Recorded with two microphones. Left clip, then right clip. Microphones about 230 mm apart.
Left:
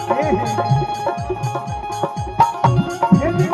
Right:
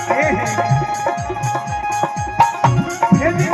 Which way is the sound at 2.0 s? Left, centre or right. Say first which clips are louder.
Even; right.